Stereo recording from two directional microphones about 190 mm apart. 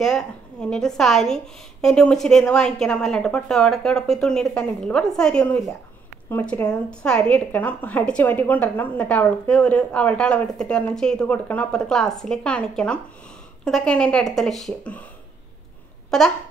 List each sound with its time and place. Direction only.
0.0 s a woman's voice: 5° left (ahead or behind)
16.1 s a woman's voice: 5° left (ahead or behind)